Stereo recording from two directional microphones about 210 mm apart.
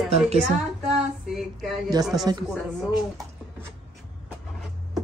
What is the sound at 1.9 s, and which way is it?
Speech, 15° right (ahead or behind).